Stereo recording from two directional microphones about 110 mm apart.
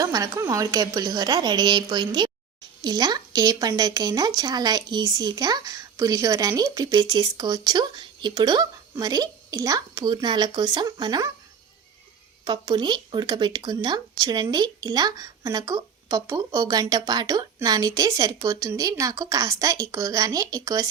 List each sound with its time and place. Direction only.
0.0 s speech: 35° right (ahead or behind)
12.5 s speech: 40° right (ahead or behind)